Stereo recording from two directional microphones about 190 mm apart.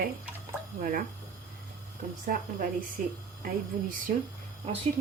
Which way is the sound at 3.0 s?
45° right (ahead or behind).